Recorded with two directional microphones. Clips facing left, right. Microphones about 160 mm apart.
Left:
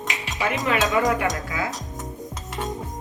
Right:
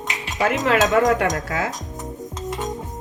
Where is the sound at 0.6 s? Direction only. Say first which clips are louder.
Right 4 dB; 70° right (ahead or behind).